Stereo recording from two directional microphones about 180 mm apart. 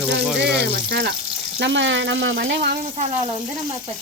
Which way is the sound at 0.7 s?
60° right (ahead or behind).